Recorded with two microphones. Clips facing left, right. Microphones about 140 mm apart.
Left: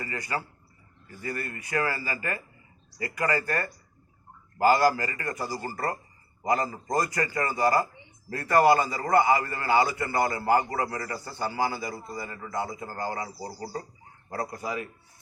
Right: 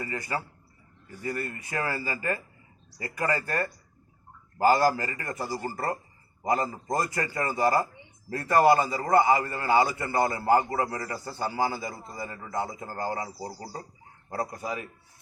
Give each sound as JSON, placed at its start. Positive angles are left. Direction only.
{"t": 0.0, "sound": "a man's voice", "side_deg": -20}
{"t": 4.7, "sound": "a man's voice", "side_deg": -20}